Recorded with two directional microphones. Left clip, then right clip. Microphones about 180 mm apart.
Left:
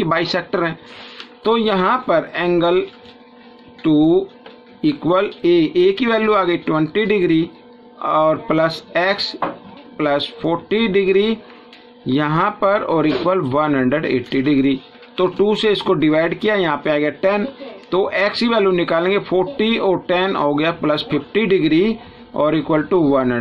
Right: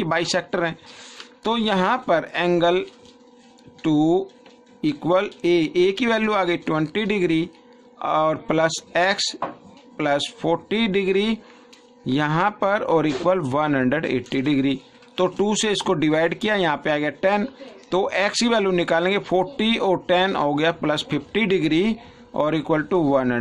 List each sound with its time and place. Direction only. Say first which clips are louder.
0.0 s speech: left 4 dB; 40° right (ahead or behind)
3.8 s speech: left 5 dB; 45° right (ahead or behind)